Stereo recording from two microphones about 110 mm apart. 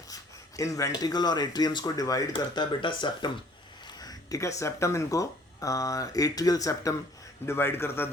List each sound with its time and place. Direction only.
0.1 s speech: 30° left (ahead or behind)
2.6 s speech: 45° left (ahead or behind)
4.0 s a man's voice: 35° left (ahead or behind)